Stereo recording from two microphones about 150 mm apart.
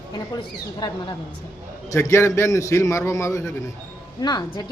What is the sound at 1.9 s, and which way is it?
A man's voice, 20° left (ahead or behind).